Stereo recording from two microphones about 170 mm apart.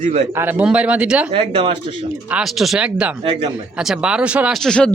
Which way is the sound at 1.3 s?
30° right (ahead or behind).